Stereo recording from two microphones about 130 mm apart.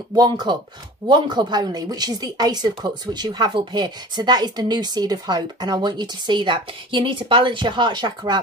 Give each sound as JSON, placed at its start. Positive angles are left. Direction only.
{"t": 0.1, "sound": "a woman's voice", "side_deg": -30}